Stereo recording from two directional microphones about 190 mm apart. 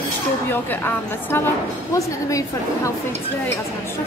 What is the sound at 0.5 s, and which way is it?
A woman's voice, 10° left (ahead or behind).